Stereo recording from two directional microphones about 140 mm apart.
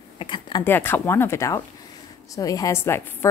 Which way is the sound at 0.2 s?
35° left (ahead or behind).